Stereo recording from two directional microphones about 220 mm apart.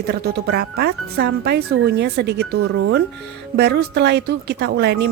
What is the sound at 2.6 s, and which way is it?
Speech, 65° right (ahead or behind).